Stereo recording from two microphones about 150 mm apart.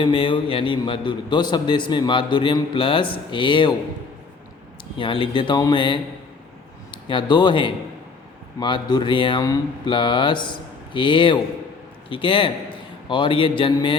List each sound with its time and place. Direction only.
0.0 s a man's voice: 35° left (ahead or behind)
4.9 s a man's voice: 35° left (ahead or behind)
7.1 s a man's voice: 30° left (ahead or behind)